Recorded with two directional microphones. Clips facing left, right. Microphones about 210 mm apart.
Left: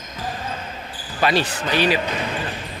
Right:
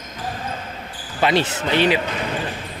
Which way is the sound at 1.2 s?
20° right (ahead or behind).